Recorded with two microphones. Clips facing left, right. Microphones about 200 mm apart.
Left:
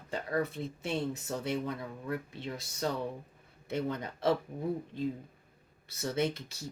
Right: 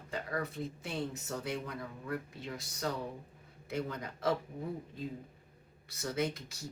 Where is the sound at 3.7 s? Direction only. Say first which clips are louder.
Left 4 dB; 25° left (ahead or behind).